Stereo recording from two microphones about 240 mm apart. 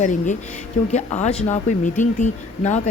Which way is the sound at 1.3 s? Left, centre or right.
Centre.